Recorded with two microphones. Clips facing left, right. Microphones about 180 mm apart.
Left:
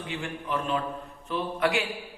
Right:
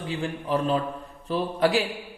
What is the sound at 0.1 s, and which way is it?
A man's voice, 35° right (ahead or behind).